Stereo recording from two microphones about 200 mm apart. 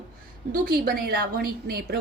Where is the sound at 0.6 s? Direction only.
50° right (ahead or behind).